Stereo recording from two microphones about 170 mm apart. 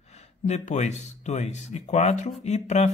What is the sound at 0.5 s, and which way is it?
A man's voice, 40° left (ahead or behind).